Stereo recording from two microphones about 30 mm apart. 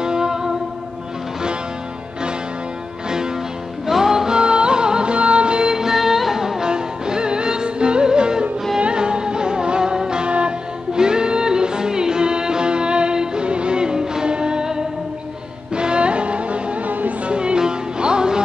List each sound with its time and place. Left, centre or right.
0.0 s music: right
3.8 s music: centre
4.4 s music: right
5.7 s music: centre
5.9 s music: centre
6.7 s music: right
10.2 s music: right
11.0 s music: right
15.7 s music: right
16.8 s music: right
17.3 s music: right